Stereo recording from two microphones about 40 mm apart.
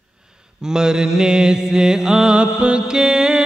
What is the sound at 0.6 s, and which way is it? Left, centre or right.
Mantra, centre.